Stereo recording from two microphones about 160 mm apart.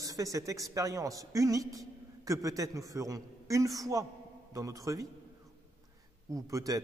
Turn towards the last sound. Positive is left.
turn(degrees=-20)  # may be behind; listen again after turning